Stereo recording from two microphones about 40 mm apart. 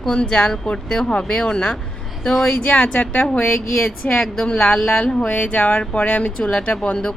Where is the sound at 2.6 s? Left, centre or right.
Left.